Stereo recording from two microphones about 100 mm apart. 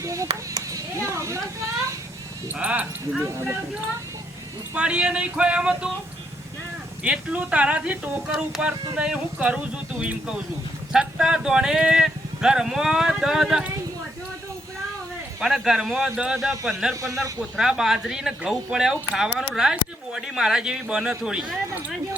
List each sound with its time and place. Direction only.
0.0 s clapping: 30° right (ahead or behind)
0.5 s speech: 30° right (ahead or behind)
2.6 s speech: 15° right (ahead or behind)
3.2 s speech: 30° right (ahead or behind)
4.7 s speech: 10° right (ahead or behind)
7.0 s speech: 10° right (ahead or behind)
15.4 s speech: 5° right (ahead or behind)